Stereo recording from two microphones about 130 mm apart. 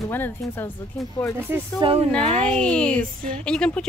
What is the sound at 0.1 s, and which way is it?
Speech, 15° left (ahead or behind).